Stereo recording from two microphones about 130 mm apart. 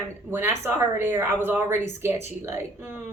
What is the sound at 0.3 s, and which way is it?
Speech, 20° right (ahead or behind).